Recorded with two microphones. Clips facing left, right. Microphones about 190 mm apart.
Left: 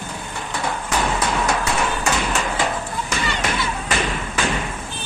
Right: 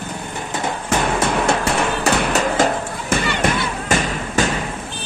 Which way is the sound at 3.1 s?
55° right (ahead or behind).